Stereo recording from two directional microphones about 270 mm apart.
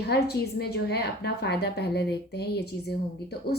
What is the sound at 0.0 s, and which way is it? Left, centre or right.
A woman's voice, left.